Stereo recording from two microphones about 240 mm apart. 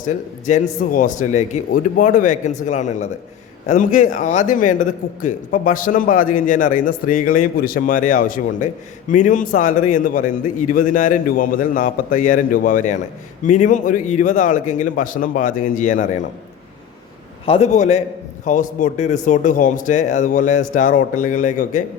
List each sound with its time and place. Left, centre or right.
0.1 s a man's voice: left
17.4 s a man's voice: left